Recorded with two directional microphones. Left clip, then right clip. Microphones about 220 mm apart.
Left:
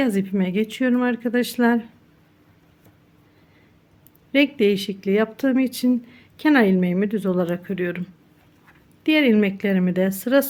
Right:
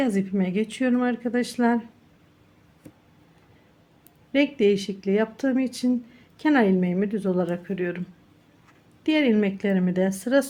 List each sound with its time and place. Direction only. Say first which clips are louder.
0.0 s speech: left 3 dB; 15° left (ahead or behind)
4.3 s speech: left 2 dB; 15° left (ahead or behind)
9.0 s speech: left 4 dB; 15° left (ahead or behind)